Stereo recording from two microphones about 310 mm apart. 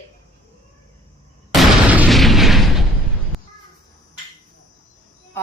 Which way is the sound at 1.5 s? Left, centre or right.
Centre.